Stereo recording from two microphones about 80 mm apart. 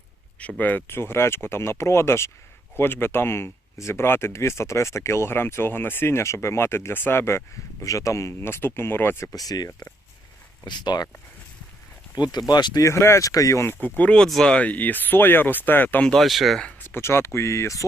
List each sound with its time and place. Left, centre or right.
0.3 s speech: centre; by 9.3 s left
9.3 s speech: left
10.7 s speech: left
12.1 s speech: left
12.8 s speech: left
13.8 s speech: left
16.0 s speech: centre
16.9 s speech: left